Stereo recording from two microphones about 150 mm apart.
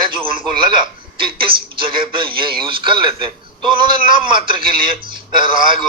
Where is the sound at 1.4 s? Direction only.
35° right (ahead or behind).